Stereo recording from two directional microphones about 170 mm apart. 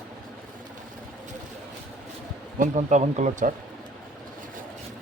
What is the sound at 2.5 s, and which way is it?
Speech, 45° right (ahead or behind).